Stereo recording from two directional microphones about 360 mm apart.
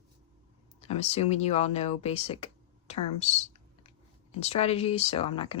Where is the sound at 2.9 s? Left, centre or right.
Centre.